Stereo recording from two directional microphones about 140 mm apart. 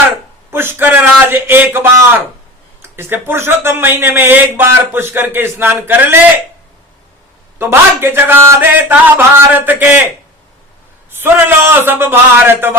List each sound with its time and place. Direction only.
0.5 s a sound: 15° right (ahead or behind)
2.8 s speech: 15° right (ahead or behind)
7.6 s speech: 15° right (ahead or behind)
11.2 s speech: 15° right (ahead or behind)